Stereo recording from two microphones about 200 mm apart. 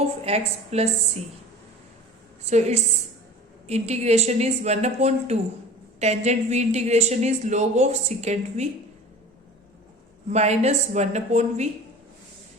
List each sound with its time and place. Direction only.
0.3 s a woman's voice: 30° right (ahead or behind)
2.5 s a woman's voice: 35° right (ahead or behind)
10.2 s a woman's voice: 35° right (ahead or behind)